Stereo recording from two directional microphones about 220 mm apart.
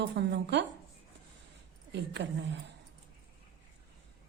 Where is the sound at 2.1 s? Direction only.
50° right (ahead or behind).